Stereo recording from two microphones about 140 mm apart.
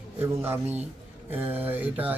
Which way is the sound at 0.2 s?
15° right (ahead or behind).